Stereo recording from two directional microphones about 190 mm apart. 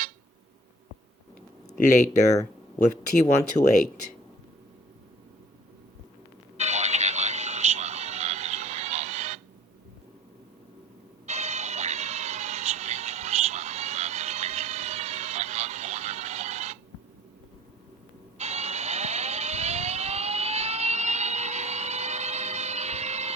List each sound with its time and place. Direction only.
1.8 s speech: 40° left (ahead or behind)
6.6 s music: 35° right (ahead or behind)
11.3 s music: 35° right (ahead or behind)
18.3 s vehicle: 35° right (ahead or behind)